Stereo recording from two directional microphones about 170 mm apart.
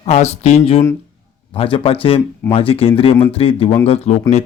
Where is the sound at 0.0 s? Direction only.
40° left (ahead or behind).